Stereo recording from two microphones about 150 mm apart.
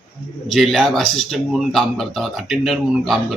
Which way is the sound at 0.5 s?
Centre (ahead or behind).